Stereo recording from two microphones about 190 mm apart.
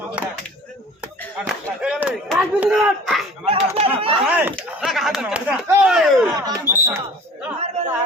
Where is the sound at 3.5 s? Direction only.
30° right (ahead or behind).